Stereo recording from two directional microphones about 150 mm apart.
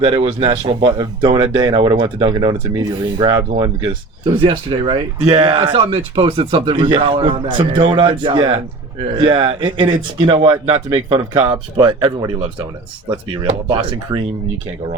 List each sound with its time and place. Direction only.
0.0 s speech: 35° right (ahead or behind)
14.1 s speech: 20° right (ahead or behind)